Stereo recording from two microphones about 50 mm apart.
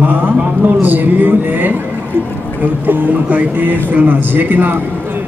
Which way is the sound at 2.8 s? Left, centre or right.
Right.